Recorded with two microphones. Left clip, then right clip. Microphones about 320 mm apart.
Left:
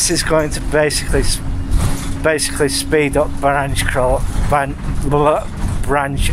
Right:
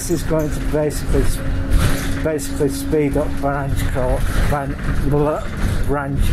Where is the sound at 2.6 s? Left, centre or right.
Left.